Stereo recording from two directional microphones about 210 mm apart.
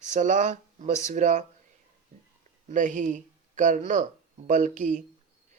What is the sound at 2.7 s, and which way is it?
Speech, 35° right (ahead or behind).